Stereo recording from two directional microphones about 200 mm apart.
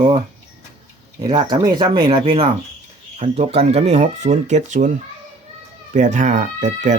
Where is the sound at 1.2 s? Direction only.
20° right (ahead or behind); by 4.9 s 35° right (ahead or behind).